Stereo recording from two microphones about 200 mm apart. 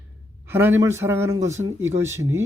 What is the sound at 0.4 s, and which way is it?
Speech, 10° right (ahead or behind).